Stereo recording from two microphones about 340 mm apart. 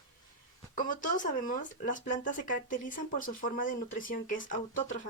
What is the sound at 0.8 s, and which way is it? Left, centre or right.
Speech, left.